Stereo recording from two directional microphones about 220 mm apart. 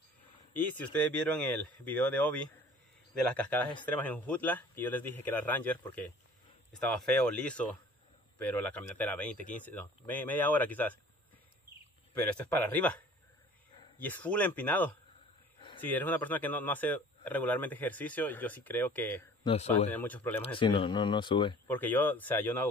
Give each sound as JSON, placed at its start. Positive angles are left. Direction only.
{"t": 0.5, "sound": "speech", "side_deg": 5}
{"t": 3.8, "sound": "speech", "side_deg": 10}
{"t": 12.1, "sound": "speech", "side_deg": 10}
{"t": 19.4, "sound": "speech", "side_deg": 30}
{"t": 19.9, "sound": "speech", "side_deg": 10}
{"t": 20.4, "sound": "speech", "side_deg": 20}
{"t": 21.6, "sound": "speech", "side_deg": 10}